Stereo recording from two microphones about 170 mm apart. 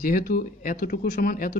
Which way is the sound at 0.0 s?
60° left (ahead or behind).